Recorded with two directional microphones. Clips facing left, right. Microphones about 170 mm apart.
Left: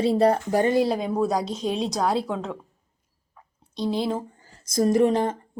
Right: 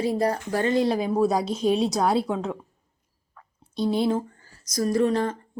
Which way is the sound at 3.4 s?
15° left (ahead or behind).